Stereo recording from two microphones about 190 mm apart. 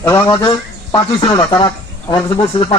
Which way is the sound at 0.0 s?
15° left (ahead or behind).